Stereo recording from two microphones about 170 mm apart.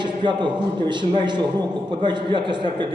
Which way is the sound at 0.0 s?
25° right (ahead or behind).